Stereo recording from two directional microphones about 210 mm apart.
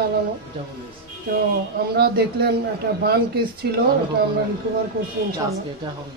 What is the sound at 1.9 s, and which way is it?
A woman's voice, 50° right (ahead or behind).